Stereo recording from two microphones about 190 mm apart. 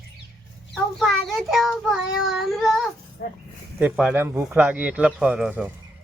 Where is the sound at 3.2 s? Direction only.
55° left (ahead or behind).